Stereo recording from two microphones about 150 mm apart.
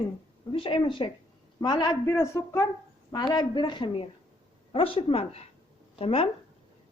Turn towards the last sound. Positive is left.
turn(degrees=40)  # may be behind; listen again after turning